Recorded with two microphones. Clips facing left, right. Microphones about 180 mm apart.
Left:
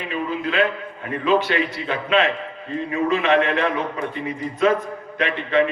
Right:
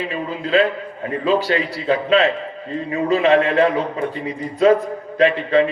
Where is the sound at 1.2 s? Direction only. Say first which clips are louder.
Right 1 dB; 35° right (ahead or behind).